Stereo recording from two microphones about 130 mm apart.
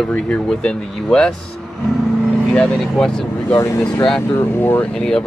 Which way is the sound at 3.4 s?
20° left (ahead or behind).